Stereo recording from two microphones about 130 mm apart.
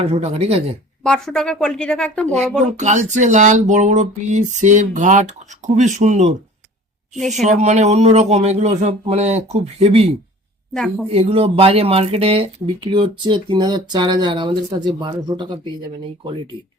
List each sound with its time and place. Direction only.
0.0 s speech: 55° right (ahead or behind)
1.0 s speech: 5° left (ahead or behind)
2.6 s a sound: 65° right (ahead or behind)
5.6 s speech: 65° right (ahead or behind)
7.2 s speech: centre (ahead or behind)
7.4 s speech: 65° right (ahead or behind)
10.8 s speech: 5° left (ahead or behind)
11.1 s speech: 50° right (ahead or behind)